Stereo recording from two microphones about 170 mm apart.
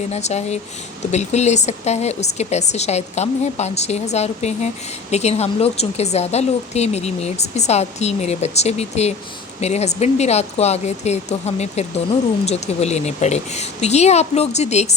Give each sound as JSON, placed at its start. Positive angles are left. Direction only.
{"t": 0.1, "sound": "a woman's voice", "side_deg": 40}